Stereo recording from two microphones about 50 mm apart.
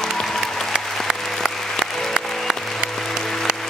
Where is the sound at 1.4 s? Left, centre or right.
Centre.